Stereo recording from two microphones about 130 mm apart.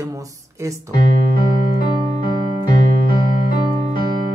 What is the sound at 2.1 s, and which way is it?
Music, 35° left (ahead or behind).